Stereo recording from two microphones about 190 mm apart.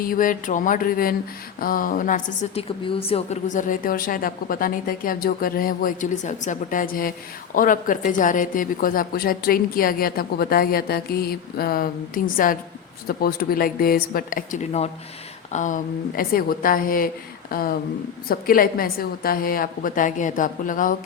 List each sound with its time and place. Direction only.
0.0 s a woman's voice: 45° left (ahead or behind)